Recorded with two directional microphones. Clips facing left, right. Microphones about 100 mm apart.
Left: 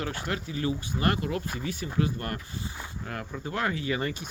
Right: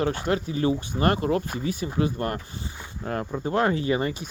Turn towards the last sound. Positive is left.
turn(degrees=-30)  # may be behind; listen again after turning